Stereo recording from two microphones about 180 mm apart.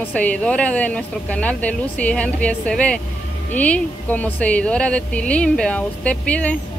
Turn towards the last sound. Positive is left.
turn(degrees=5)  # may be behind; listen again after turning